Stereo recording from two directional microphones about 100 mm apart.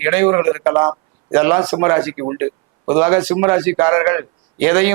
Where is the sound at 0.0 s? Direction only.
20° right (ahead or behind).